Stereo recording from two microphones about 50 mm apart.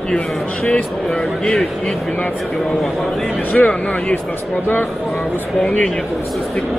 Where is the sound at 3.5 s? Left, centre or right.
Left.